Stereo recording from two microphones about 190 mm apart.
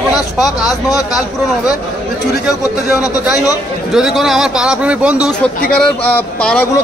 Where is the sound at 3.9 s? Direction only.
Centre (ahead or behind).